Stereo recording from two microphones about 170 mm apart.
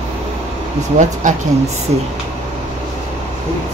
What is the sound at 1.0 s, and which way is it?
Speech, 45° right (ahead or behind).